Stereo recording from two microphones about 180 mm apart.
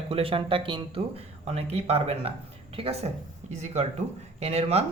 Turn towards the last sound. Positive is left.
turn(degrees=-35)  # may be behind; listen again after turning